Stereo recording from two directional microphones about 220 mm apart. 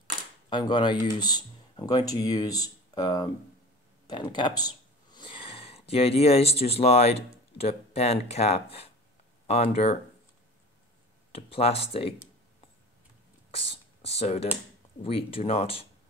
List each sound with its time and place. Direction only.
0.5 s speech: 20° left (ahead or behind)
11.3 s speech: 25° left (ahead or behind)
13.6 s speech: 25° left (ahead or behind)